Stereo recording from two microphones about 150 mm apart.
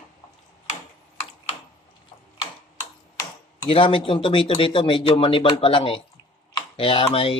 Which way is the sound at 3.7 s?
35° left (ahead or behind).